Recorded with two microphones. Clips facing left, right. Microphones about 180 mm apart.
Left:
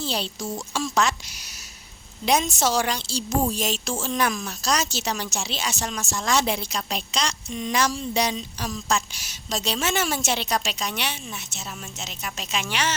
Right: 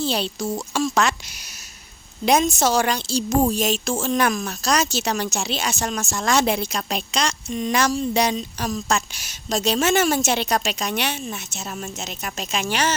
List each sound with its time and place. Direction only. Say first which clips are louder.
0.0 s speech: right 5 dB; 65° right (ahead or behind)
2.2 s a woman's voice: right 4 dB; 50° right (ahead or behind)